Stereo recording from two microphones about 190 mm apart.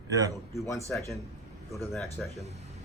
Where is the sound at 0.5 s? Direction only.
15° left (ahead or behind).